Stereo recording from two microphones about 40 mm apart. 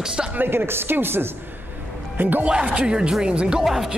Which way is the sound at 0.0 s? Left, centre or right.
Centre.